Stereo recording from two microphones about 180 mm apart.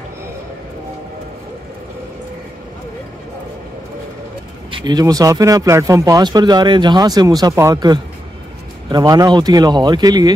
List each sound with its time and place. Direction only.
4.6 s speech: 25° right (ahead or behind)